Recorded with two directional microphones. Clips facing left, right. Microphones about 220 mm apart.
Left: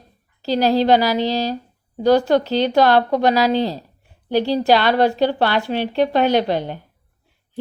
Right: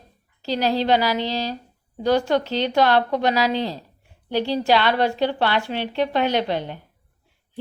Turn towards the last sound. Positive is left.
turn(degrees=40)  # may be behind; listen again after turning